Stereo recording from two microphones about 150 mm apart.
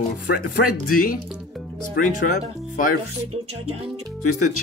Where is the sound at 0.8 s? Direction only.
70° left (ahead or behind).